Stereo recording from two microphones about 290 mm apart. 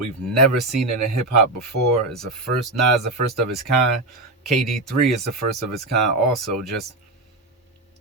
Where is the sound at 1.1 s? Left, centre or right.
Right.